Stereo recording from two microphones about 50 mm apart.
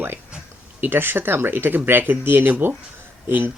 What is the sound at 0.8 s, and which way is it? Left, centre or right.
Speech, right.